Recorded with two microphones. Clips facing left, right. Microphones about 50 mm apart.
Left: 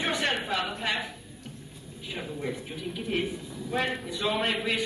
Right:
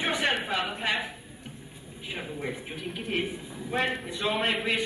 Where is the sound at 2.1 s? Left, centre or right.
Right.